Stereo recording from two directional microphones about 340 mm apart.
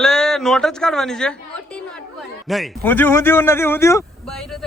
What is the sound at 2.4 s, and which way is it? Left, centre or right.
A man's voice, centre.